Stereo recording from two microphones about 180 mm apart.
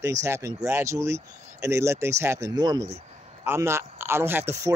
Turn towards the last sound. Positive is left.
turn(degrees=-15)  # may be behind; listen again after turning